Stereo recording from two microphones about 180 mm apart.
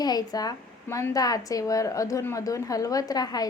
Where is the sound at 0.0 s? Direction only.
20° left (ahead or behind).